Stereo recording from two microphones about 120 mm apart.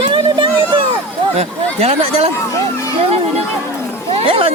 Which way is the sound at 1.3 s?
60° right (ahead or behind).